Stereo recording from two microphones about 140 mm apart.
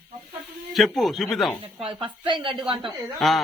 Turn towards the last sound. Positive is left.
turn(degrees=0)  # may be behind; listen again after turning